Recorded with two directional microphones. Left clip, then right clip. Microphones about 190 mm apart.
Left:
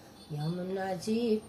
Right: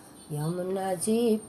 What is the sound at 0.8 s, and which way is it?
Music, 25° right (ahead or behind).